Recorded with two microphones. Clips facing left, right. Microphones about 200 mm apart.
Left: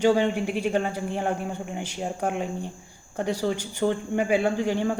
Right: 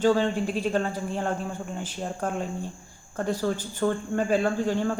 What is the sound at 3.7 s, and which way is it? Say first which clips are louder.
Speech: left 2 dB; 15° left (ahead or behind).